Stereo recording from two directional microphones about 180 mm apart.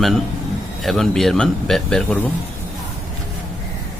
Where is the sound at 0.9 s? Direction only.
Centre (ahead or behind).